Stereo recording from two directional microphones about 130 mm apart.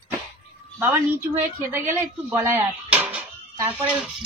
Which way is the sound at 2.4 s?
15° right (ahead or behind).